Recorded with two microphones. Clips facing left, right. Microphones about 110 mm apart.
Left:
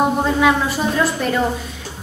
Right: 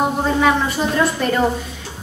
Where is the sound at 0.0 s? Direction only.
Centre (ahead or behind).